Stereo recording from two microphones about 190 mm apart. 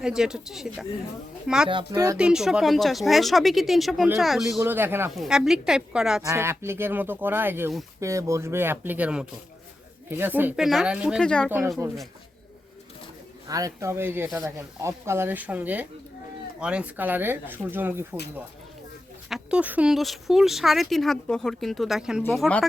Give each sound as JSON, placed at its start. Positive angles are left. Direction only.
{"t": 0.0, "sound": "speech", "side_deg": -5}
{"t": 1.7, "sound": "speech", "side_deg": -20}
{"t": 2.1, "sound": "speech", "side_deg": -5}
{"t": 4.6, "sound": "speech", "side_deg": -10}
{"t": 11.2, "sound": "speech", "side_deg": 5}
{"t": 13.5, "sound": "speech", "side_deg": -20}
{"t": 19.3, "sound": "speech", "side_deg": -5}